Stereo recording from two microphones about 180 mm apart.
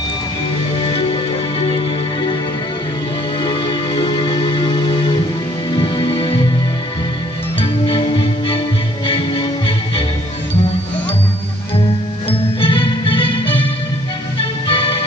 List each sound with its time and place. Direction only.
0.8 s music: 30° left (ahead or behind)
3.4 s music: 25° left (ahead or behind)
7.6 s music: 30° left (ahead or behind)
12.5 s music: 30° left (ahead or behind)
14.7 s music: 30° left (ahead or behind)